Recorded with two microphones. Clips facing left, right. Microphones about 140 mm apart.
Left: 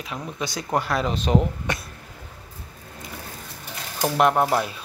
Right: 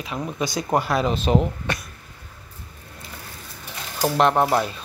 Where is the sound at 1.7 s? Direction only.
20° left (ahead or behind).